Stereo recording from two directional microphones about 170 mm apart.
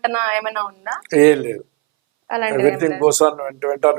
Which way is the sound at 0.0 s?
10° right (ahead or behind).